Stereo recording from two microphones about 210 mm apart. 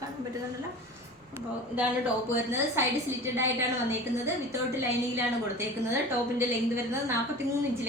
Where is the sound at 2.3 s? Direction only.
10° right (ahead or behind).